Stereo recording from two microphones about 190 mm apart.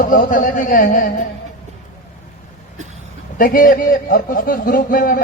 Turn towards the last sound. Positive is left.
turn(degrees=50)  # may be behind; listen again after turning